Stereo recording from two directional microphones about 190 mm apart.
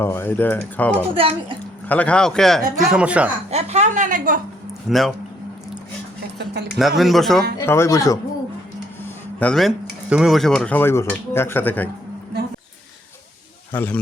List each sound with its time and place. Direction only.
0.0 s speech: 10° left (ahead or behind)
1.1 s speech: 30° right (ahead or behind)
1.9 s speech: 5° left (ahead or behind)
3.5 s a woman's voice: 35° right (ahead or behind)
4.9 s speech: centre (ahead or behind)
6.4 s speech: 60° right (ahead or behind)
6.7 s speech: centre (ahead or behind)
7.6 s speech: 15° left (ahead or behind)
9.0 s speech: 5° left (ahead or behind)
13.7 s speech: 10° left (ahead or behind)